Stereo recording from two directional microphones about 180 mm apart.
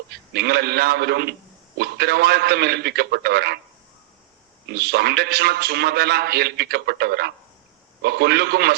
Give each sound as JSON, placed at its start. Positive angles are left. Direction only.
{"t": 0.3, "sound": "a man's voice", "side_deg": -65}
{"t": 4.7, "sound": "a man's voice", "side_deg": -65}